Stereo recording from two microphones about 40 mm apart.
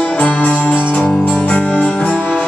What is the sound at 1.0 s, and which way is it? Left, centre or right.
Music, centre.